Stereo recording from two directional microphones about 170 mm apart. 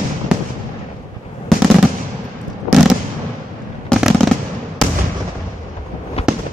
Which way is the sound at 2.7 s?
Centre (ahead or behind).